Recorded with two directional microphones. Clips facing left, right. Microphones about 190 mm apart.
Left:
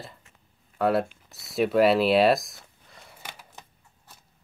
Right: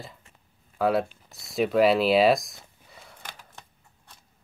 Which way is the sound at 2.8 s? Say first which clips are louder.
Left 1 dB; centre (ahead or behind).